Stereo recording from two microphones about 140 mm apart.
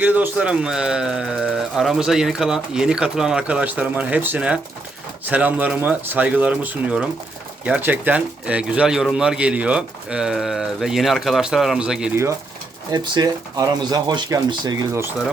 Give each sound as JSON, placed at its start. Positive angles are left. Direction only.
{"t": 0.0, "sound": "speech", "side_deg": -10}
{"t": 12.1, "sound": "speech", "side_deg": -20}